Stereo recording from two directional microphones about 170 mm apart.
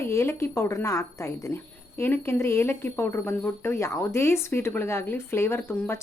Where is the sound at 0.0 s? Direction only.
15° left (ahead or behind).